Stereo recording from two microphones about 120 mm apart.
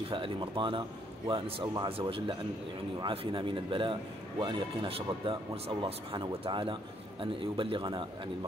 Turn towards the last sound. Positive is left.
turn(degrees=-45)  # may be behind; listen again after turning